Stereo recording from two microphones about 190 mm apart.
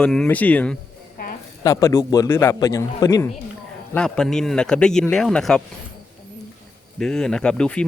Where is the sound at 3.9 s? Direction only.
5° left (ahead or behind).